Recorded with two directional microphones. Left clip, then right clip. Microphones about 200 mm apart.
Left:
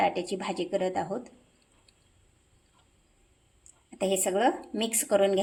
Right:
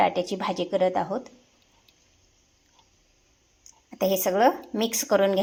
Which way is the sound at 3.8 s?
15° right (ahead or behind).